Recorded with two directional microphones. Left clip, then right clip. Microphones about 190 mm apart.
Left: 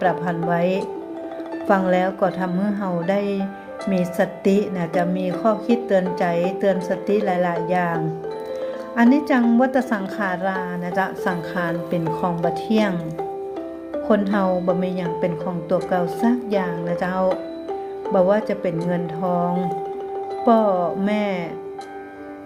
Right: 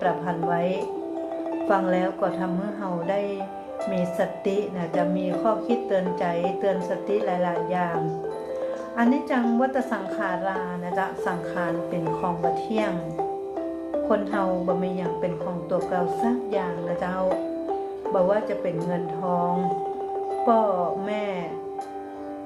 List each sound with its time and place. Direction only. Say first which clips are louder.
0.0 s a woman's voice: left 4 dB; 50° left (ahead or behind)
9.0 s a woman's voice: left 6 dB; 50° left (ahead or behind)
14.1 s a woman's voice: left 6 dB; 50° left (ahead or behind)